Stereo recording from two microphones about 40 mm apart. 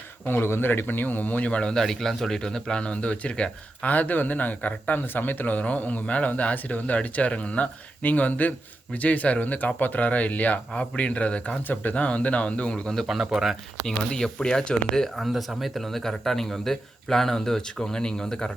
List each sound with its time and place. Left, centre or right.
0.3 s speech: left
0.7 s speech: left
1.5 s a man's voice: left
1.7 s speech: centre
3.8 s speech: left
5.0 s speech: left
11.7 s speech: left
11.9 s speech: left
13.3 s speech: centre
14.2 s speech: centre
15.1 s speech: centre